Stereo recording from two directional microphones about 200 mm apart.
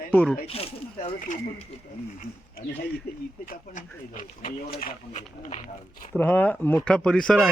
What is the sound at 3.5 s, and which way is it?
Speech, 40° left (ahead or behind).